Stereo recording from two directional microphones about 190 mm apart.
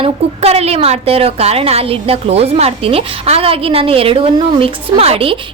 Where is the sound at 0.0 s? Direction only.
35° right (ahead or behind).